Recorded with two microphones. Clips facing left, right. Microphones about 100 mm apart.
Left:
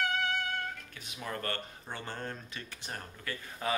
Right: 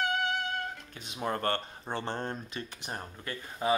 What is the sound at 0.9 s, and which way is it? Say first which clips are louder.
Speech: right 4 dB; 25° right (ahead or behind).